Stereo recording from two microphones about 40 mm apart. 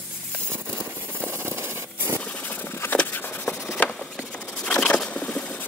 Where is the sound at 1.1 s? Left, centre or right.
Right.